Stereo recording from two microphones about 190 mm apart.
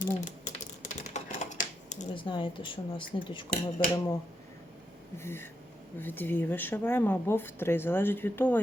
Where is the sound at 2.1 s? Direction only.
25° left (ahead or behind).